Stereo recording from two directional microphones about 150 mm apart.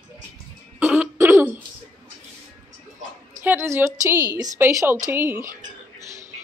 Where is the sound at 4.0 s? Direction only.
20° right (ahead or behind).